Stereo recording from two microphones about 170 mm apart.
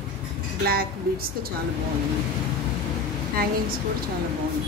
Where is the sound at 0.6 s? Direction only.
60° right (ahead or behind).